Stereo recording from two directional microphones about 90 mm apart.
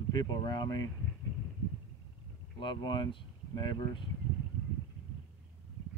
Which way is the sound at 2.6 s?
60° left (ahead or behind).